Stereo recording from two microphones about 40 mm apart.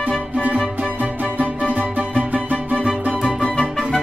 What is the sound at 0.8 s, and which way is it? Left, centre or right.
Music, right.